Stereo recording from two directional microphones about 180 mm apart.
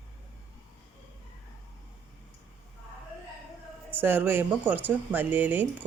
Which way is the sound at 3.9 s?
10° right (ahead or behind).